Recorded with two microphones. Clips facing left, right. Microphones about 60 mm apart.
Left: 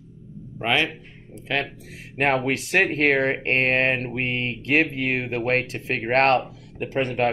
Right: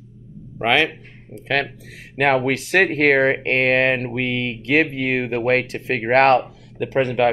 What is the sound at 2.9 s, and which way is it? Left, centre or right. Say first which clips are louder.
Speech: right 4 dB; right.